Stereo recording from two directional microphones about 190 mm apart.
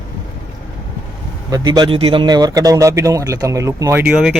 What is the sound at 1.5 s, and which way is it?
Speech, 20° right (ahead or behind).